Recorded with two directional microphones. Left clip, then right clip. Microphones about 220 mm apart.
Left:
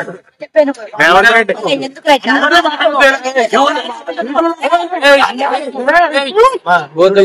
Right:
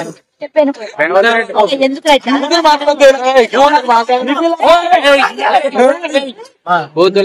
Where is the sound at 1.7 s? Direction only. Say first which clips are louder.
Right 1 dB; centre (ahead or behind).